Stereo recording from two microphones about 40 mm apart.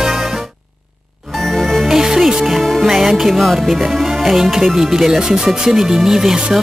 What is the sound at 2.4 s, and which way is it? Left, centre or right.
Music, centre.